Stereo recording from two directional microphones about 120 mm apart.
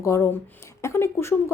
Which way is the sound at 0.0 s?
25° left (ahead or behind).